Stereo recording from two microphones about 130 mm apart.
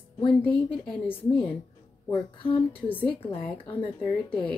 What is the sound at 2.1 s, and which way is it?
Speech, 45° left (ahead or behind).